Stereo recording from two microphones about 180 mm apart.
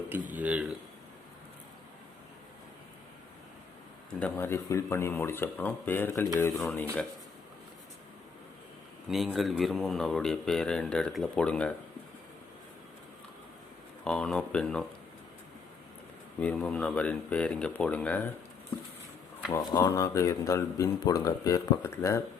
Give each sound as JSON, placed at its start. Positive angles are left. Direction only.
{"t": 0.3, "sound": "speech", "side_deg": -10}
{"t": 4.2, "sound": "speech", "side_deg": 10}
{"t": 9.0, "sound": "speech", "side_deg": 0}
{"t": 14.0, "sound": "speech", "side_deg": 5}
{"t": 16.4, "sound": "speech", "side_deg": 10}
{"t": 19.5, "sound": "speech", "side_deg": 20}